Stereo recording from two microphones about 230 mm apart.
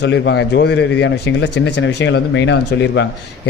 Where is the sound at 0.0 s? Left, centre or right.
Left.